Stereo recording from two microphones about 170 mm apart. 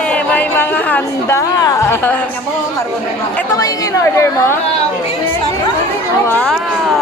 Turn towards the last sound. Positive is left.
turn(degrees=10)  # may be behind; listen again after turning